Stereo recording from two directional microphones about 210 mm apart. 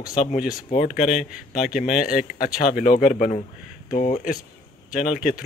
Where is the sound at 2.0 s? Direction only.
40° left (ahead or behind).